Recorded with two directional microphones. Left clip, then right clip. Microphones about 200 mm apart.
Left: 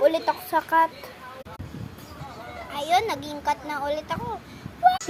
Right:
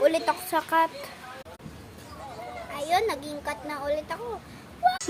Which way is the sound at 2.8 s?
10° left (ahead or behind).